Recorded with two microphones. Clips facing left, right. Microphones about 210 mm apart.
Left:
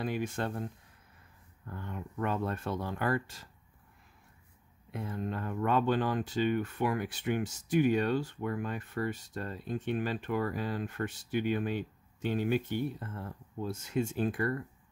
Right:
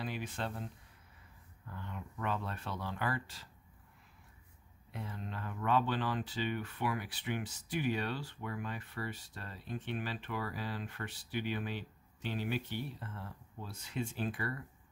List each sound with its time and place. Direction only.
0.0 s speech: 50° left (ahead or behind)
1.7 s speech: 50° left (ahead or behind)
4.9 s speech: 50° left (ahead or behind)